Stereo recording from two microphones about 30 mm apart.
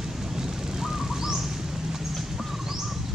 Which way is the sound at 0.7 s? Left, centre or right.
Centre.